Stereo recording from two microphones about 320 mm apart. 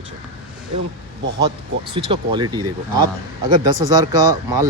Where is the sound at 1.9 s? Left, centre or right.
Centre.